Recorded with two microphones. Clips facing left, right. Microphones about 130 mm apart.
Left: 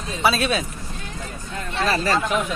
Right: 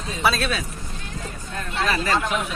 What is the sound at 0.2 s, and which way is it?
Speech, 5° left (ahead or behind).